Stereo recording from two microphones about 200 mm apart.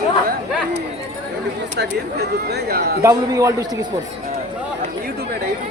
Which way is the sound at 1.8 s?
55° right (ahead or behind).